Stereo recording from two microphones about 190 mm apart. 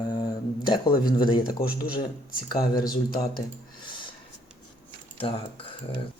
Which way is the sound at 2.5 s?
50° left (ahead or behind).